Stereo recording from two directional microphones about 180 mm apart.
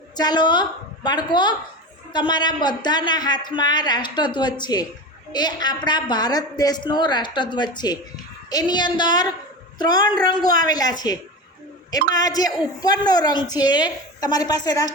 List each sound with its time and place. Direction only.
0.2 s a woman's voice: 25° left (ahead or behind)